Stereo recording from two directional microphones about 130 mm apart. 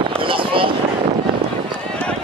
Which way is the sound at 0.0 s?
40° right (ahead or behind).